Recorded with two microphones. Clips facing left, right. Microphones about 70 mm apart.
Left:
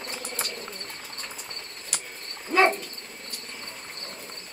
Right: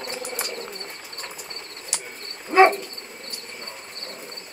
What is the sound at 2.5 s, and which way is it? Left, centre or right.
Insect, right.